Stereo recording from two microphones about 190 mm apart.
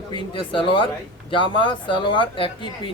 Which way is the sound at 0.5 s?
25° left (ahead or behind).